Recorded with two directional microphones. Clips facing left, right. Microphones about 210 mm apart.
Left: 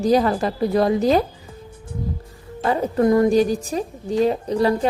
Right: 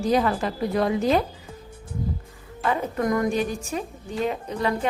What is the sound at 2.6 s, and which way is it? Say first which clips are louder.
A woman's voice: left 6 dB; 35° left (ahead or behind).